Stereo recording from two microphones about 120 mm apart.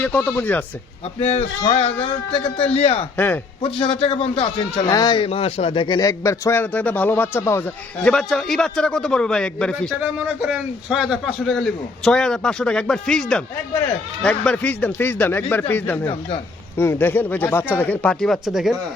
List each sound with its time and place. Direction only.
0.0 s speech: 15° left (ahead or behind)
1.2 s a man's voice: 60° left (ahead or behind)
2.0 s a man's voice: 50° left (ahead or behind)
3.2 s speech: 15° left (ahead or behind)
3.6 s a man's voice: 45° left (ahead or behind)
6.0 s a man's voice: 30° left (ahead or behind)
8.0 s a man's voice: 5° left (ahead or behind)
10.2 s a man's voice: 5° right (ahead or behind); by 15.6 s 15° left (ahead or behind)
16.7 s speech: 20° left (ahead or behind); by 18.8 s 5° right (ahead or behind)